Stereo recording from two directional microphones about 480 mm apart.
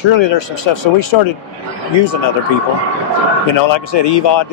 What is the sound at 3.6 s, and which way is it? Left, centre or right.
Speech, left.